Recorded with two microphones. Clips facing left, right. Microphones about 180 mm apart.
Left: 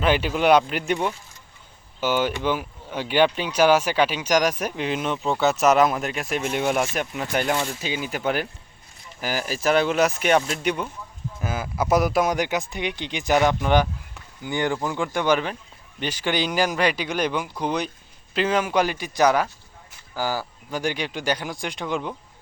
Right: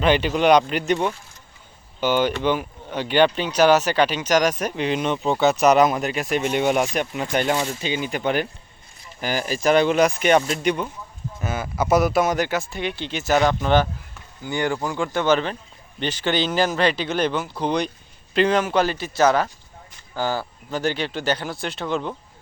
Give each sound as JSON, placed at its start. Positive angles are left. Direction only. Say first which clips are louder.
{"t": 0.0, "sound": "speech", "louder": "right 2 dB", "side_deg": 5}
{"t": 7.5, "sound": "speech", "louder": "right 2 dB", "side_deg": -10}
{"t": 7.8, "sound": "speech", "louder": "right 3 dB", "side_deg": 5}
{"t": 12.3, "sound": "speech", "louder": "right 1 dB", "side_deg": 15}